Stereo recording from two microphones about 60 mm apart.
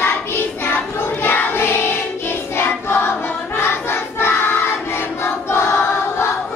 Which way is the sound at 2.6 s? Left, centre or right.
Left.